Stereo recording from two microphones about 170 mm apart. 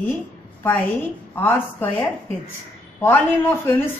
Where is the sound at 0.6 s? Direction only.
10° left (ahead or behind).